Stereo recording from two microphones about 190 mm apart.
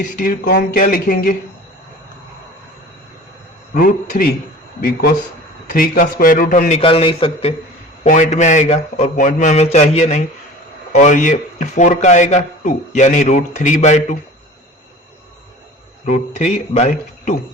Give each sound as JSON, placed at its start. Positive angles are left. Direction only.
{"t": 0.2, "sound": "speech", "side_deg": 50}
{"t": 3.8, "sound": "speech", "side_deg": 45}
{"t": 6.7, "sound": "a man's voice", "side_deg": 30}
{"t": 8.0, "sound": "a man's voice", "side_deg": 40}
{"t": 16.0, "sound": "a man's voice", "side_deg": 40}